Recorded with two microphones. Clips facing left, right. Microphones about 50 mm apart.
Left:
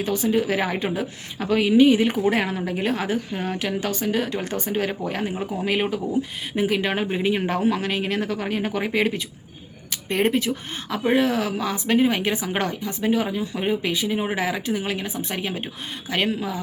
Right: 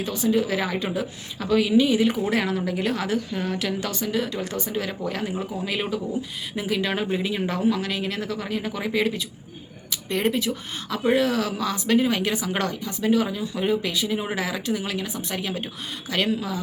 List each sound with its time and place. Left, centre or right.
0.0 s a woman's voice: left